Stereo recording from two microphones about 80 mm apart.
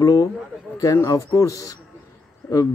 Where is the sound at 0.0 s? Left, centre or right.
Left.